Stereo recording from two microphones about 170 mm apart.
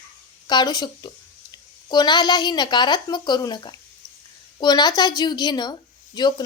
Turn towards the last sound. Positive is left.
turn(degrees=25)  # may be behind; listen again after turning